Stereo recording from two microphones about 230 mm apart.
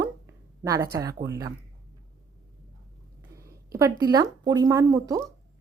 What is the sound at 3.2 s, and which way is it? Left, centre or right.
Speech, centre.